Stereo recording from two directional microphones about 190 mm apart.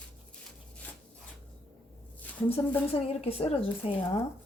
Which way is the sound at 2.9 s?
30° left (ahead or behind).